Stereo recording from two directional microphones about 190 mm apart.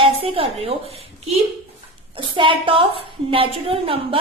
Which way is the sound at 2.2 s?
25° right (ahead or behind).